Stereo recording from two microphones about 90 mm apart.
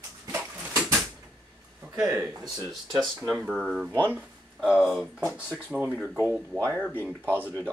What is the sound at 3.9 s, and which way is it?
Speech, 20° right (ahead or behind).